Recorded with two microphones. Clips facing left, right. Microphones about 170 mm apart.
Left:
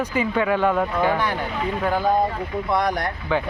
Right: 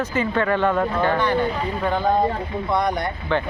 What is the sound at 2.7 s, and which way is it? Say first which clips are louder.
Speech: right 1 dB; centre (ahead or behind).